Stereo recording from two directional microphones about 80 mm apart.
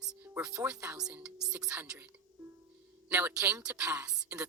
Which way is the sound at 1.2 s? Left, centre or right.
Centre.